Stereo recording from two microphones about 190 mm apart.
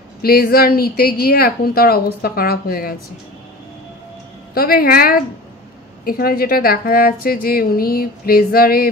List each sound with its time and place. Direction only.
0.2 s a woman's voice: 50° left (ahead or behind)
4.6 s a woman's voice: 50° left (ahead or behind)